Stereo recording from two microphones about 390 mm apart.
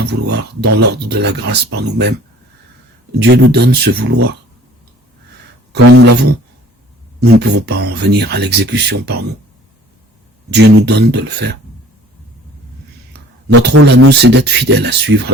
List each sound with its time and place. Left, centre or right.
0.0 s speech: right
0.6 s speech: right
0.9 s speech: right
3.2 s speech: right
5.7 s speech: right
7.2 s speech: right
10.5 s speech: right
13.5 s speech: right